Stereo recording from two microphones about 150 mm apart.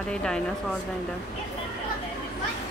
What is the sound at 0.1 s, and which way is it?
Speech, 5° left (ahead or behind).